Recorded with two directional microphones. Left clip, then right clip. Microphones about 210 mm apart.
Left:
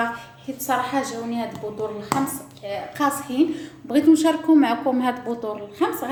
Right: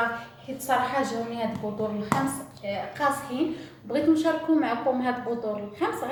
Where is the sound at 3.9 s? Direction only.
50° left (ahead or behind).